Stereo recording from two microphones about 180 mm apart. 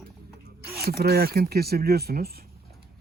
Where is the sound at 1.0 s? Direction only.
60° right (ahead or behind).